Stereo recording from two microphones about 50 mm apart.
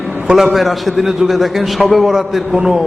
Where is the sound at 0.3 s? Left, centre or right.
Centre.